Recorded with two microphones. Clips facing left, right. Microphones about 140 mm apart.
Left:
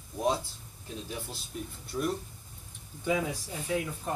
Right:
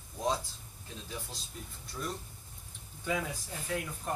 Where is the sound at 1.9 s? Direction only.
20° left (ahead or behind).